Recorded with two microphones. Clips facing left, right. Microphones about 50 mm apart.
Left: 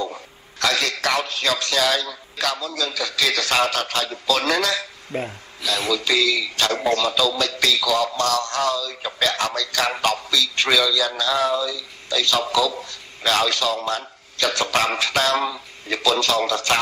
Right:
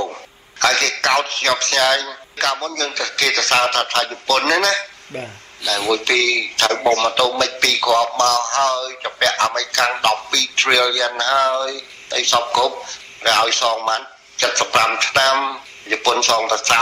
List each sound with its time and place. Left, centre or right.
0.6 s speech: right
5.1 s speech: centre
5.9 s speech: right